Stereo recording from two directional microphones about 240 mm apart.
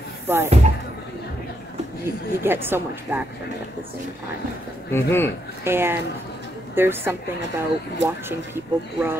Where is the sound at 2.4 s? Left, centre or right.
Centre.